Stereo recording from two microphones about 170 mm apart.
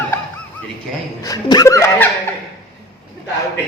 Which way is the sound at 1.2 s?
20° left (ahead or behind).